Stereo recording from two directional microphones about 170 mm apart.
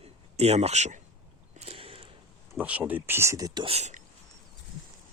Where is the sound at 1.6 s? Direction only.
35° right (ahead or behind).